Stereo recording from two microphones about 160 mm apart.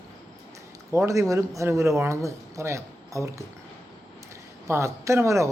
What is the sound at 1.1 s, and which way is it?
Speech, 20° right (ahead or behind).